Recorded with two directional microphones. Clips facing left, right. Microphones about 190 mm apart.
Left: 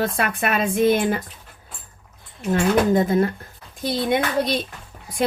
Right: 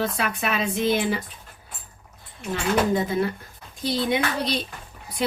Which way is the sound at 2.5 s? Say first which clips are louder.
Left 5 dB; 50° left (ahead or behind).